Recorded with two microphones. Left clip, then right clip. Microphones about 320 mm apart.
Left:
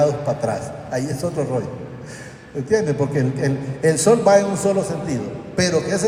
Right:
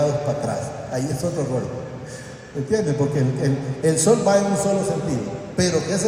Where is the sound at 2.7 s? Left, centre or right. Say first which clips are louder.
Left 2 dB; left.